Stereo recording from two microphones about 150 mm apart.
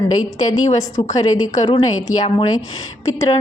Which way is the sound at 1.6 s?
40° left (ahead or behind).